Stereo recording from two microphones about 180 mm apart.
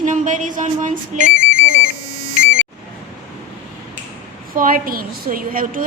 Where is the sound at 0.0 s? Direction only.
45° right (ahead or behind).